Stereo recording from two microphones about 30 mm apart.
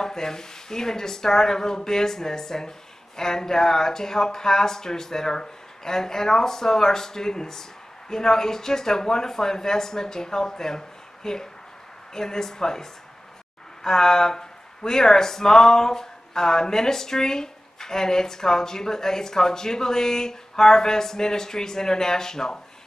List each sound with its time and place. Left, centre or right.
0.0 s speech: centre
13.8 s speech: centre